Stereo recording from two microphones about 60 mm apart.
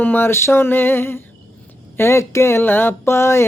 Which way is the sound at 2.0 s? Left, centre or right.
Left.